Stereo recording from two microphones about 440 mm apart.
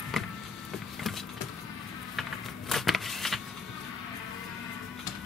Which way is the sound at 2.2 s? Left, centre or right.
Centre.